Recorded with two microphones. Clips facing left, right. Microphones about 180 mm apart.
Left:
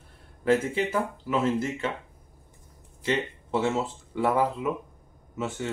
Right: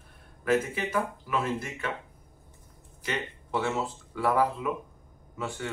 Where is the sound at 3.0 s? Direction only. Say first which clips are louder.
Left 6 dB; 25° left (ahead or behind).